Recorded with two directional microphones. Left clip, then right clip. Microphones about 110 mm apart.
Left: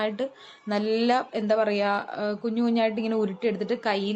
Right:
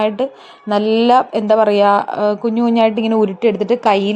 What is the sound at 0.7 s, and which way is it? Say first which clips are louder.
A woman's voice: right 12 dB; 45° right (ahead or behind).